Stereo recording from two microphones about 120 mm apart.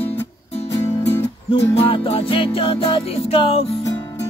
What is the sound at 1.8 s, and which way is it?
Music, 50° left (ahead or behind).